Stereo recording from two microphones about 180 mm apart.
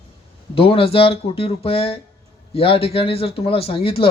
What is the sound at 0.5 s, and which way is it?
Speech, 30° left (ahead or behind).